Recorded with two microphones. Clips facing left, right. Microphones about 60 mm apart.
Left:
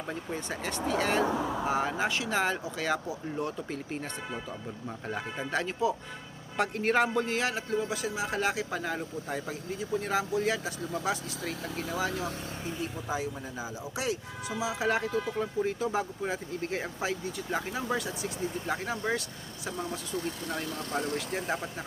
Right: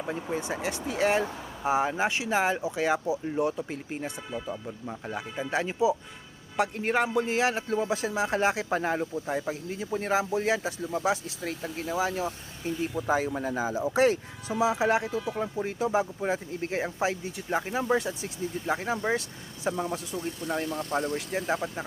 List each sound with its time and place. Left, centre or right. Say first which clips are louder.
0.0 s speech: right 4 dB; centre
4.9 s speech: even; centre
5.5 s speech: right 4 dB; centre
7.3 s speech: right 4 dB; right
9.2 s speech: right 5 dB; centre
9.7 s speech: right 2 dB; right
11.4 s speech: right 3 dB; centre
13.1 s speech: right 9 dB; right
13.7 s speech: right 10 dB; right
20.1 s speech: right 1 dB; centre